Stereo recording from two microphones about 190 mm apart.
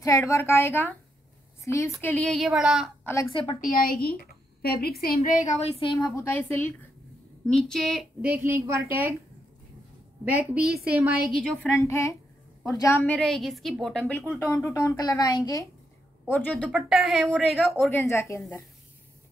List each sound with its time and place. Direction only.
0.0 s a woman's voice: 15° left (ahead or behind); by 3.1 s centre (ahead or behind)
3.6 s a woman's voice: 50° left (ahead or behind); by 9.1 s 10° right (ahead or behind)
10.2 s a woman's voice: 10° right (ahead or behind)
11.7 s a woman's voice: 15° left (ahead or behind)
16.3 s a woman's voice: 10° left (ahead or behind)
17.8 s a woman's voice: 15° left (ahead or behind)